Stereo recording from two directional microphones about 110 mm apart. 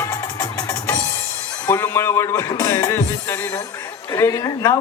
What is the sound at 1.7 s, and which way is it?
Music, 20° left (ahead or behind).